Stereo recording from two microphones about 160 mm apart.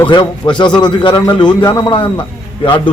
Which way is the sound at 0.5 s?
30° left (ahead or behind).